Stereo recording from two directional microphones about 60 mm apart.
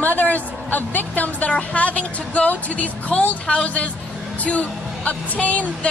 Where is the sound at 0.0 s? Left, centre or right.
Left.